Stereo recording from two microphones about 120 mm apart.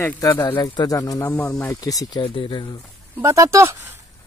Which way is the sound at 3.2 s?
25° right (ahead or behind).